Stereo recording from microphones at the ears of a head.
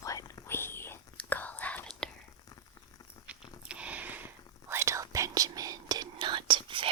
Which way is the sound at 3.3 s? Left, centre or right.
Right.